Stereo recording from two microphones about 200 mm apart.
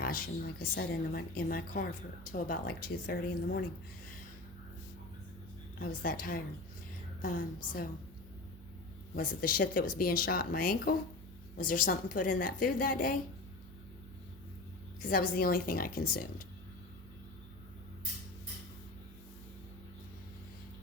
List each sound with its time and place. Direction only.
0.0 s a woman's voice: 45° left (ahead or behind)
5.8 s a woman's voice: 45° left (ahead or behind)
9.1 s a woman's voice: 45° left (ahead or behind)
15.0 s a woman's voice: 45° left (ahead or behind)